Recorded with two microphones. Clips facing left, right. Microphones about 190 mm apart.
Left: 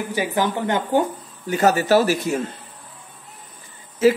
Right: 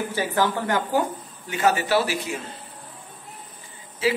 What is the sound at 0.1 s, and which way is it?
Speech, 15° left (ahead or behind).